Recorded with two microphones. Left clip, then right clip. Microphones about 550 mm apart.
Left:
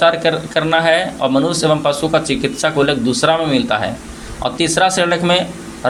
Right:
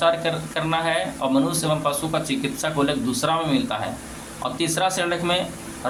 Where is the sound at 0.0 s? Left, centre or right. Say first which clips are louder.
Left 8 dB; right.